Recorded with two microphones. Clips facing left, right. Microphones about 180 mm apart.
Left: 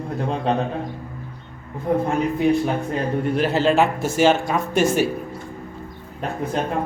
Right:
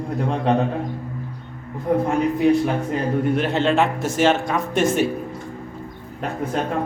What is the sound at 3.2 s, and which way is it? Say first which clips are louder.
Speech: left 3 dB; centre (ahead or behind).